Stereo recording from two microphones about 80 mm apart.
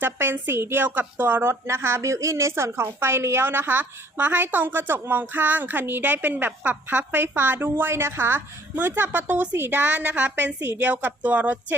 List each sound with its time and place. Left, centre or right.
0.0 s a woman's voice: right